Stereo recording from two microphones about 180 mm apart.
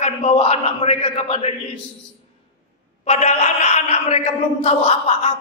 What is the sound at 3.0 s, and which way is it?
A man's voice, 40° left (ahead or behind).